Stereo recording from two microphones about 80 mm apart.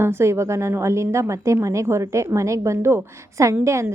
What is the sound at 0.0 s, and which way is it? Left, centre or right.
A woman's voice, right.